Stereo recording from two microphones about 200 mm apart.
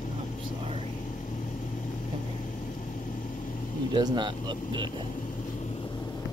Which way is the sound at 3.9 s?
20° right (ahead or behind).